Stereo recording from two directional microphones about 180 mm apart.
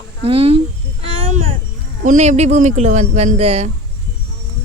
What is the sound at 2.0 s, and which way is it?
Speech, 40° right (ahead or behind).